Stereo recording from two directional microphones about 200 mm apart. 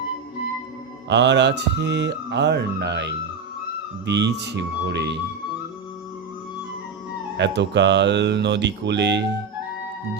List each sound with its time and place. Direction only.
1.0 s speech: 60° right (ahead or behind)
7.3 s speech: 60° right (ahead or behind)